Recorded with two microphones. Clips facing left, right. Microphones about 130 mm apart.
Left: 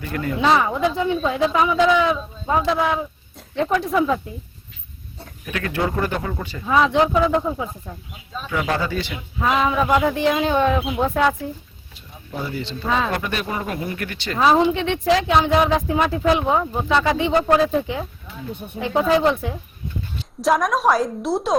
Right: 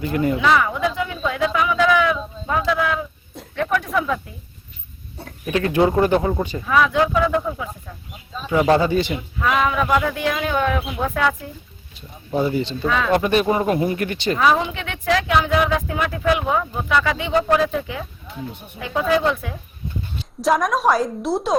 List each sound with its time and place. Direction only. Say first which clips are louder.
0.0 s speech: right 6 dB; 20° right (ahead or behind)
0.3 s a woman's voice: left 5 dB; 30° left (ahead or behind)
5.5 s speech: right 6 dB; 25° right (ahead or behind)
6.7 s a woman's voice: left 1 dB; 25° left (ahead or behind)
8.8 s a man's voice: right 6 dB; 20° right (ahead or behind)
9.4 s a woman's voice: left 1 dB; 25° left (ahead or behind)
12.3 s speech: right 8 dB; 20° right (ahead or behind)
14.3 s a woman's voice: left 4 dB; 30° left (ahead or behind)
20.4 s a woman's voice: even; centre (ahead or behind)